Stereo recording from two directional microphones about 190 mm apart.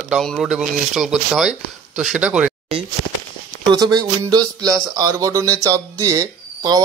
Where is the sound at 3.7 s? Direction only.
20° right (ahead or behind).